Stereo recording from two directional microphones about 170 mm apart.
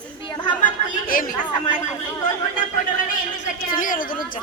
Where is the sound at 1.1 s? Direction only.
55° left (ahead or behind).